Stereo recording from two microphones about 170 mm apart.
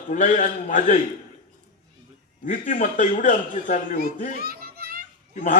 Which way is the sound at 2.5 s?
45° left (ahead or behind).